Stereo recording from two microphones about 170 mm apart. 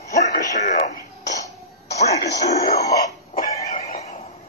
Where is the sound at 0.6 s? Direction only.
45° left (ahead or behind).